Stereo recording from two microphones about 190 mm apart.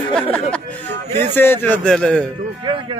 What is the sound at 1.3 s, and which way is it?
Speech, 10° left (ahead or behind).